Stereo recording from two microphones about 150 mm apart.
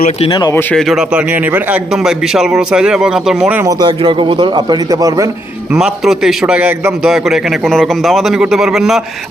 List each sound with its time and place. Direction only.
0.3 s speech: 25° left (ahead or behind)
0.5 s a man's voice: 5° left (ahead or behind)
3.6 s a man's voice: 25° right (ahead or behind)
5.7 s a man's voice: centre (ahead or behind)